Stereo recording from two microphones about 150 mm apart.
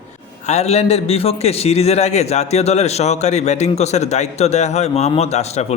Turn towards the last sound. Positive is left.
turn(degrees=45)  # may be behind; listen again after turning